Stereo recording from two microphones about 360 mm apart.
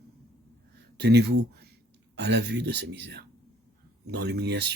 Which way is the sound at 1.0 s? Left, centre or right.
Right.